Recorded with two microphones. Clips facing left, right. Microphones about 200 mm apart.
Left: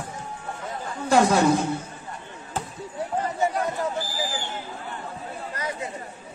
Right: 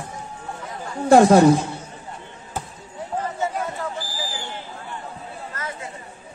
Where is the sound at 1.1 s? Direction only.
50° right (ahead or behind).